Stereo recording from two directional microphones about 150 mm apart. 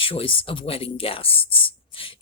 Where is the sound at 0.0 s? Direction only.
35° left (ahead or behind).